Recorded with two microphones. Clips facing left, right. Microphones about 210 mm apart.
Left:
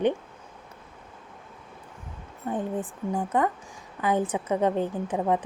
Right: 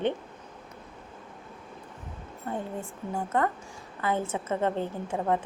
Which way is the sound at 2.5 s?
15° left (ahead or behind).